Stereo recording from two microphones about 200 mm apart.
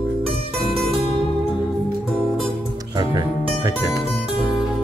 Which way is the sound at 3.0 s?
20° right (ahead or behind).